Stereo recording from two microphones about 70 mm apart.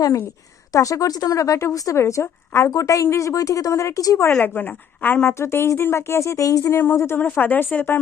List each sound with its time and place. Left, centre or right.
0.7 s speech: left
2.6 s speech: left
4.4 s a woman's voice: left
5.4 s speech: left
6.7 s speech: left
7.2 s a woman's voice: left